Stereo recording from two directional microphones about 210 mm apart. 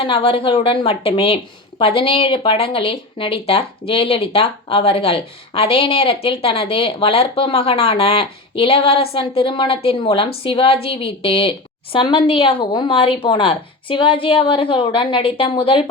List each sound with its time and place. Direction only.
0.0 s speech: 25° left (ahead or behind)